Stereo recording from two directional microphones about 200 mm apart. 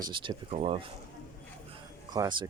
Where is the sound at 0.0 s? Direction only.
25° right (ahead or behind).